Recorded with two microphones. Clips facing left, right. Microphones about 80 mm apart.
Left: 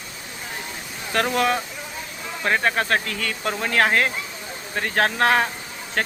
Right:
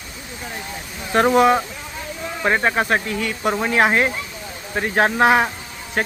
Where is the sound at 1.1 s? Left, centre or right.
Right.